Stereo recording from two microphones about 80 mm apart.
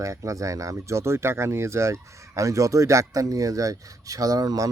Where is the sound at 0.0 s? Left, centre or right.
Right.